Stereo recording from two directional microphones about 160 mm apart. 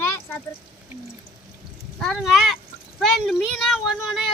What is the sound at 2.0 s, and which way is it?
A child's voice, centre (ahead or behind).